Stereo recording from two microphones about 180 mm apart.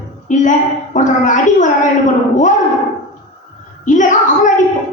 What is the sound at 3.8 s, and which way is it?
Speech, 45° left (ahead or behind).